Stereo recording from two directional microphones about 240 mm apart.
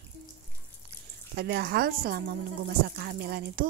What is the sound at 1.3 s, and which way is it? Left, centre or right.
Speech, right.